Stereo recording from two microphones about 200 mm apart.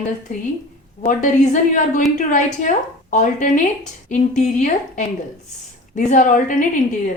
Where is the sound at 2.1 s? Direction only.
40° left (ahead or behind).